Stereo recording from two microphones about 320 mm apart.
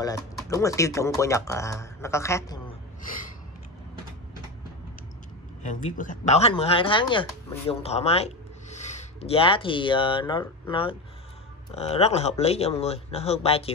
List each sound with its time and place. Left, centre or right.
0.5 s speech: centre
5.6 s speech: left